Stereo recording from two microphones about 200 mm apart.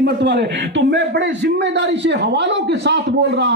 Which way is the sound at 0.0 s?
60° right (ahead or behind).